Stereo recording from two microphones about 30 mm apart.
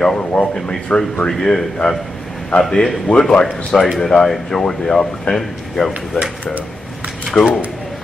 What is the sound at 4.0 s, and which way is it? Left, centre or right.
Speech, centre.